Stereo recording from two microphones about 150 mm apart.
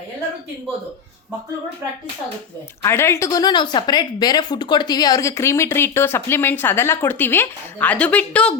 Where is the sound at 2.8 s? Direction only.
15° left (ahead or behind).